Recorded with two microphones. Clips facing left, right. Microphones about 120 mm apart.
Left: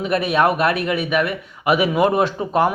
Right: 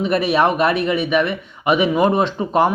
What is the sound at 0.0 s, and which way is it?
Speech, centre (ahead or behind).